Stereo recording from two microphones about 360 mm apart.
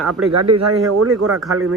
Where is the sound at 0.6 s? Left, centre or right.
Right.